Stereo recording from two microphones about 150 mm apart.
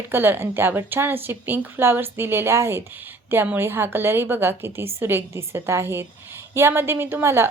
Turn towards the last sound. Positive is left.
turn(degrees=-15)  # may be behind; listen again after turning